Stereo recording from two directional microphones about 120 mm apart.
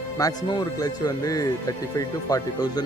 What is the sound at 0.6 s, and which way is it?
Speech, 30° left (ahead or behind).